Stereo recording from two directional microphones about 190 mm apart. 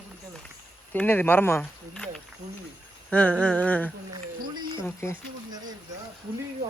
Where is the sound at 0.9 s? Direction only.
10° left (ahead or behind).